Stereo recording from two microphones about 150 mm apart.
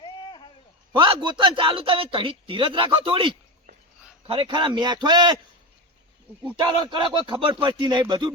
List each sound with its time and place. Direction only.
0.0 s a sound: 30° left (ahead or behind)
0.9 s speech: 30° right (ahead or behind)
6.6 s speech: 30° right (ahead or behind)